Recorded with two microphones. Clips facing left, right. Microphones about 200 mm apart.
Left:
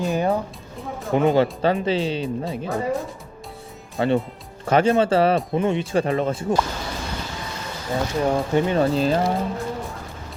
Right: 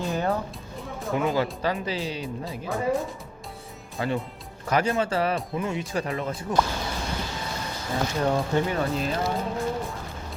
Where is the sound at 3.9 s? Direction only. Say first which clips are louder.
Left 7 dB; 30° left (ahead or behind).